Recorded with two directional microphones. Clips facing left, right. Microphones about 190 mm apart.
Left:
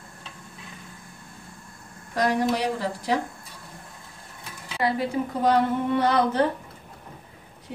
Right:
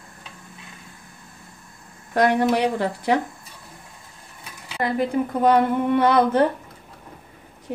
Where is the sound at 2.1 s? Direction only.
60° right (ahead or behind).